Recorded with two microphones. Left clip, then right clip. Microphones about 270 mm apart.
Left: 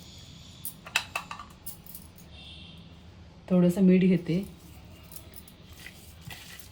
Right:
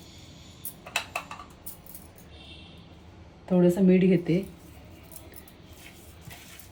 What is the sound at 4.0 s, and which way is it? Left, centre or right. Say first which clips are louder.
Speech: right 4 dB; centre.